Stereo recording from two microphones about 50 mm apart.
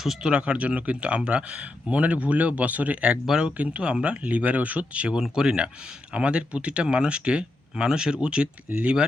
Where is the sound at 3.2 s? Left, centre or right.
Centre.